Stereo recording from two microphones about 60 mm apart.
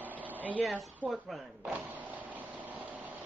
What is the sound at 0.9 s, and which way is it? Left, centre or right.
Speech, centre.